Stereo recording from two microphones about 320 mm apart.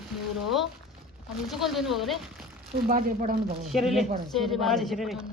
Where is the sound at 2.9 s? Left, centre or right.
Right.